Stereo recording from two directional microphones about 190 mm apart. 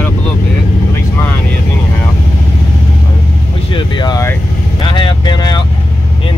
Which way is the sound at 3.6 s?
25° left (ahead or behind).